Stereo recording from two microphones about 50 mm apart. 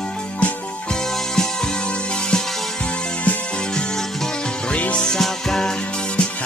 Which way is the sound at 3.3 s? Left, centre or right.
Left.